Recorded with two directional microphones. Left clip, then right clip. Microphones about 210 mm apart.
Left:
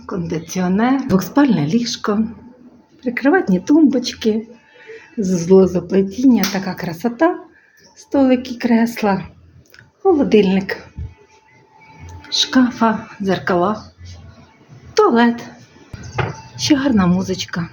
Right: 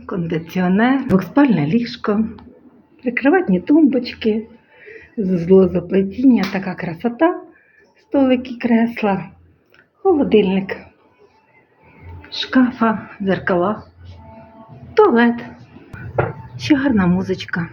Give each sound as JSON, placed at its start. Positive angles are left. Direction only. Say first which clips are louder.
{"t": 0.0, "sound": "speech", "louder": "right 1 dB", "side_deg": 0}
{"t": 12.3, "sound": "speech", "louder": "left 2 dB", "side_deg": 10}
{"t": 14.9, "sound": "speech", "louder": "right 1 dB", "side_deg": 10}
{"t": 16.6, "sound": "speech", "louder": "left 1 dB", "side_deg": 10}